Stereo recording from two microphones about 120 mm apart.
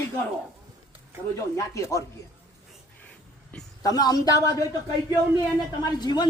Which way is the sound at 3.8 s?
30° left (ahead or behind).